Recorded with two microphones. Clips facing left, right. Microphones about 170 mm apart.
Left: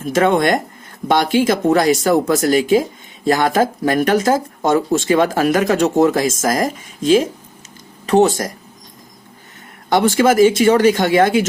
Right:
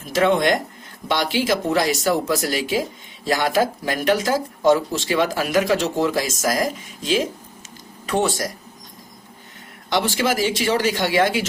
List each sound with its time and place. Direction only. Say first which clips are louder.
0.1 s speech: left 3 dB; 50° left (ahead or behind)
9.9 s speech: left 8 dB; 50° left (ahead or behind)